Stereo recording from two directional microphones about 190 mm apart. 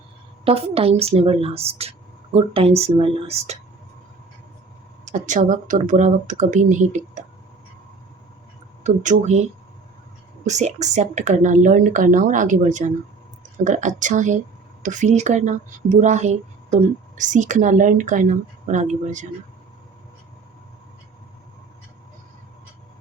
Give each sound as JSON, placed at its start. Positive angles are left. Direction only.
{"t": 0.4, "sound": "speech", "side_deg": -30}
{"t": 5.0, "sound": "speech", "side_deg": -40}
{"t": 8.8, "sound": "speech", "side_deg": -40}
{"t": 10.4, "sound": "speech", "side_deg": -40}